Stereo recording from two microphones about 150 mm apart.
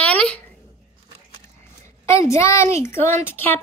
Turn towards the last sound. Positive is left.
turn(degrees=15)  # may be behind; listen again after turning